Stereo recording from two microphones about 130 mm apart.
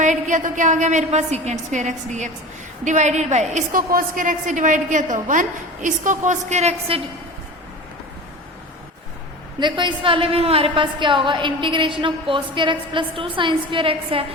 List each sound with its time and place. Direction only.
0.0 s a woman's voice: 70° right (ahead or behind); by 7.0 s 55° right (ahead or behind)
9.6 s a woman's voice: 35° right (ahead or behind)